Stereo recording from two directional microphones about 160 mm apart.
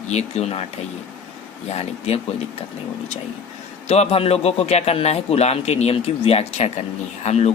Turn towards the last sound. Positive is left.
turn(degrees=45)  # may be behind; listen again after turning